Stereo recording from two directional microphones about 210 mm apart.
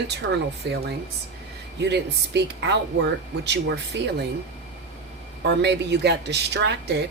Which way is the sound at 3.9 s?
55° right (ahead or behind).